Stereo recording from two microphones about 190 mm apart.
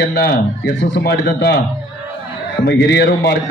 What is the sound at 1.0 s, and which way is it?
Speech, 60° left (ahead or behind).